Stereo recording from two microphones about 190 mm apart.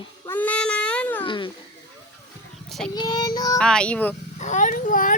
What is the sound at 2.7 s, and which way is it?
Child singing, centre (ahead or behind).